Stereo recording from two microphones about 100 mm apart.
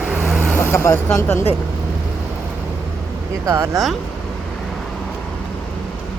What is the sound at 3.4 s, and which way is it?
Speech, 35° right (ahead or behind).